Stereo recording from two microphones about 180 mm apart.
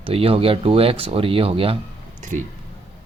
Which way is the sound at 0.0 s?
30° right (ahead or behind).